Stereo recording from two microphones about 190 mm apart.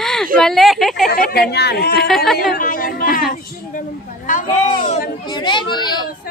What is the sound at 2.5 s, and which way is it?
A woman's voice, 45° left (ahead or behind).